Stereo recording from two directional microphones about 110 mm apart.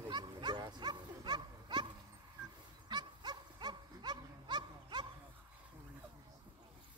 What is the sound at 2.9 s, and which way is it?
Dog, 40° right (ahead or behind).